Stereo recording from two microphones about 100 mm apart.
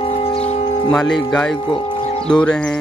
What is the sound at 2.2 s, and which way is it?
Speech, 10° left (ahead or behind).